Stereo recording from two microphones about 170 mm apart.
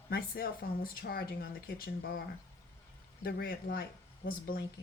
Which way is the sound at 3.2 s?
65° left (ahead or behind).